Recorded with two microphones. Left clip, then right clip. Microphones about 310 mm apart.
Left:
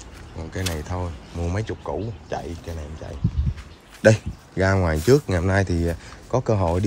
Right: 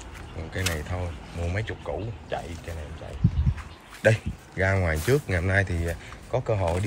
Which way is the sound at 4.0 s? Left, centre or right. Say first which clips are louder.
Left 5 dB; left.